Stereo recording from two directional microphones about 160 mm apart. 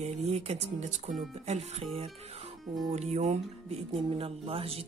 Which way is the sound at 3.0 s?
45° right (ahead or behind).